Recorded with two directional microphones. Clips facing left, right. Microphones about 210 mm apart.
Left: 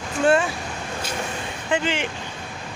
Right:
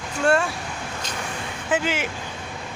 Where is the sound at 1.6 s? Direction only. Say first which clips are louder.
Even; 5° right (ahead or behind).